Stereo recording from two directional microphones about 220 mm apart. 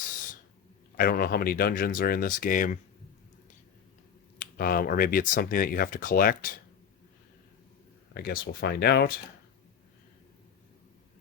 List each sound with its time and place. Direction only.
0.9 s speech: 40° left (ahead or behind)
4.4 s speech: 40° left (ahead or behind)
8.1 s speech: 45° left (ahead or behind)